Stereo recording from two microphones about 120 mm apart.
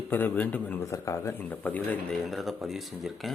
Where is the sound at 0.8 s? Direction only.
25° left (ahead or behind).